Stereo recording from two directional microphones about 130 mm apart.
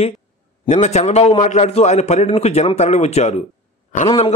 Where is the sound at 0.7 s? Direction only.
60° left (ahead or behind).